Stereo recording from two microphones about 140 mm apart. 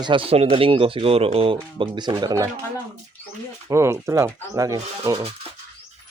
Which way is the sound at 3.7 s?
20° right (ahead or behind).